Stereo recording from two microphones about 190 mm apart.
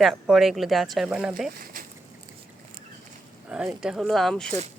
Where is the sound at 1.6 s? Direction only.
45° right (ahead or behind).